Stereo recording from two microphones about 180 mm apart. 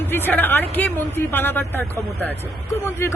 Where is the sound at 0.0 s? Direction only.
10° left (ahead or behind).